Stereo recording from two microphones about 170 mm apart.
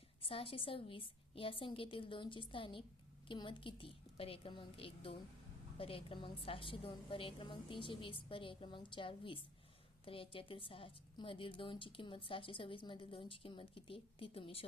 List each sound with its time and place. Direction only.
0.2 s a woman's voice: 30° left (ahead or behind)